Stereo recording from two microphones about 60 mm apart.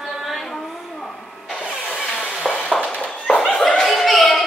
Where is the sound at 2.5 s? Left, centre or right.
Centre.